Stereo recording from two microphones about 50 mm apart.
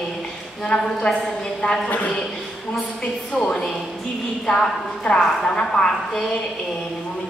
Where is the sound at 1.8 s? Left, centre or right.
Left.